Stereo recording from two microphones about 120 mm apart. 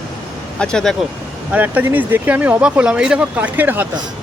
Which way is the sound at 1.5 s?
15° right (ahead or behind).